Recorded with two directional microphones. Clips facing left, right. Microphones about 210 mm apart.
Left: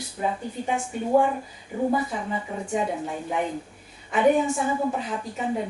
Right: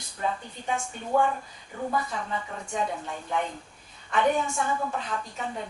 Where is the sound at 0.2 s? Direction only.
15° left (ahead or behind).